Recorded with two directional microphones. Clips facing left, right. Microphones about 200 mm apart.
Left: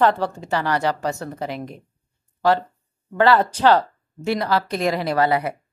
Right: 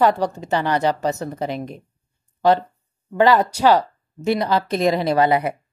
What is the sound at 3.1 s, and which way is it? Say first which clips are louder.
Speech: right 1 dB; 15° right (ahead or behind).